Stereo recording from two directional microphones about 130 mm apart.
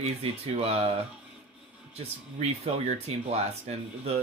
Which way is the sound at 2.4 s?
55° right (ahead or behind).